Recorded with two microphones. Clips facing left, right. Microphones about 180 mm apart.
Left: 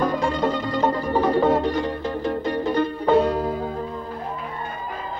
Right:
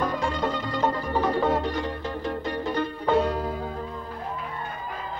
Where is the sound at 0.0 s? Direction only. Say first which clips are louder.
Left 5 dB; 35° left (ahead or behind).